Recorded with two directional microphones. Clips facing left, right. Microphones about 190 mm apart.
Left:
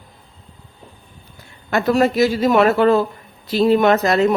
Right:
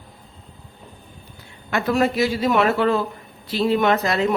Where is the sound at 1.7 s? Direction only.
40° left (ahead or behind).